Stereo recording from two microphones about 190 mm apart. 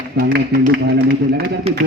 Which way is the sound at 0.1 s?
55° right (ahead or behind).